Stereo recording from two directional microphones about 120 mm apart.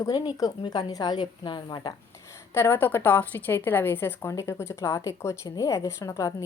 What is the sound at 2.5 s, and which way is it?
A woman's voice, 20° left (ahead or behind).